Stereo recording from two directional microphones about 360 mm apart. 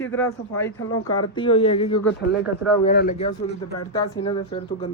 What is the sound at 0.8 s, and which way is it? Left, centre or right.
Speech, left.